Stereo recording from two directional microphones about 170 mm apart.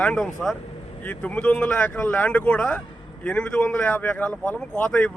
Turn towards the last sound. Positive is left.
turn(degrees=5)  # may be behind; listen again after turning